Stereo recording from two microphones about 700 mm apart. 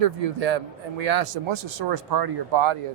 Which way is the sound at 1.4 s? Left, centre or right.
Right.